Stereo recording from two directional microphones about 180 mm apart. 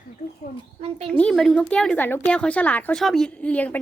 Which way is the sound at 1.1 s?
5° left (ahead or behind).